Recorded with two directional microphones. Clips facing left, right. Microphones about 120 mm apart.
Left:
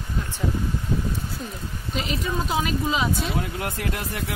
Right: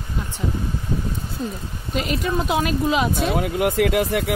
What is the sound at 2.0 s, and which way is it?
Speech, 55° right (ahead or behind).